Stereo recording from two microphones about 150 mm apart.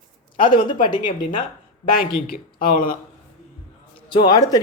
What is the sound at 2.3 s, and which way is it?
Speech, 70° left (ahead or behind).